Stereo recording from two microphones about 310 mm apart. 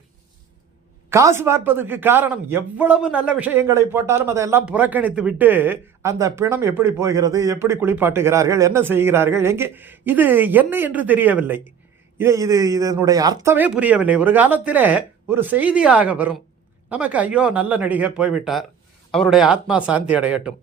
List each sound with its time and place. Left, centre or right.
1.1 s a man's voice: centre